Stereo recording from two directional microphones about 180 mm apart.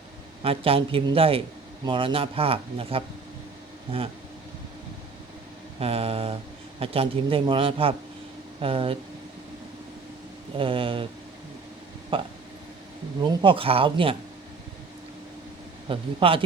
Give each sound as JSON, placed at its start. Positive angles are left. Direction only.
{"t": 0.4, "sound": "speech", "side_deg": -30}
{"t": 5.8, "sound": "speech", "side_deg": -35}
{"t": 10.6, "sound": "speech", "side_deg": -30}
{"t": 12.1, "sound": "speech", "side_deg": -30}
{"t": 13.4, "sound": "speech", "side_deg": -30}
{"t": 15.9, "sound": "speech", "side_deg": -30}